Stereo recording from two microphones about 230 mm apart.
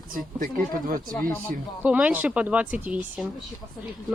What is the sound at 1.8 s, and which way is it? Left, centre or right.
Speech, centre.